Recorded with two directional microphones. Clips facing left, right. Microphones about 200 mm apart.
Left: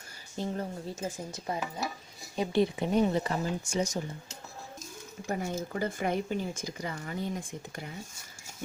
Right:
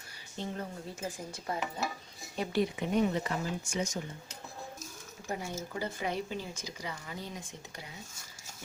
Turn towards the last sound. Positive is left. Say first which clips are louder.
# left 7 dB
turn(degrees=50)  # may be behind; listen again after turning